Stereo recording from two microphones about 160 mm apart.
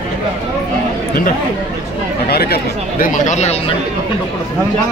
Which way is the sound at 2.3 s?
75° left (ahead or behind).